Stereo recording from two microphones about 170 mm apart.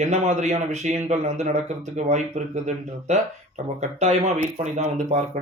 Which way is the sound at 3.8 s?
45° right (ahead or behind).